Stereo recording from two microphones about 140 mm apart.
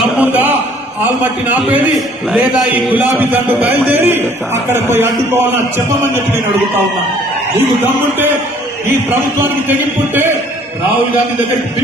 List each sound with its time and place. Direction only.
0.2 s a sound: 15° right (ahead or behind)
2.3 s a man's voice: 5° right (ahead or behind)
9.0 s a man's voice: 15° right (ahead or behind)